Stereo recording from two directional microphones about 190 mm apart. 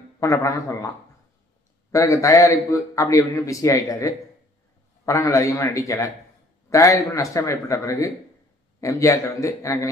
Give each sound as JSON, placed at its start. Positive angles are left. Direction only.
{"t": 0.2, "sound": "a man's voice", "side_deg": 15}
{"t": 1.9, "sound": "a man's voice", "side_deg": 15}